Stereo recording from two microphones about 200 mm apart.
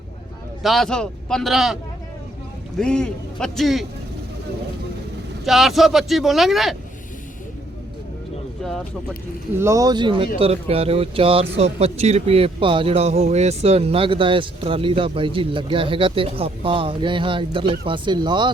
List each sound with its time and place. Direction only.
0.6 s speech: centre (ahead or behind)
5.5 s speech: centre (ahead or behind)
9.6 s speech: 15° right (ahead or behind)